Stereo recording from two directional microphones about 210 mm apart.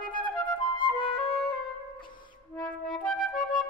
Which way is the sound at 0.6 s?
25° left (ahead or behind).